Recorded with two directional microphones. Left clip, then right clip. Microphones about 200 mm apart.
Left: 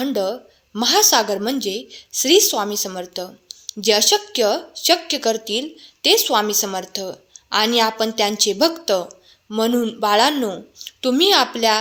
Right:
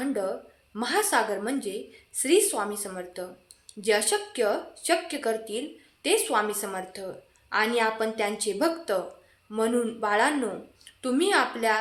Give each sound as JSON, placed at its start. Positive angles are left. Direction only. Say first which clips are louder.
{"t": 0.0, "sound": "a woman's voice", "louder": "left 8 dB", "side_deg": 45}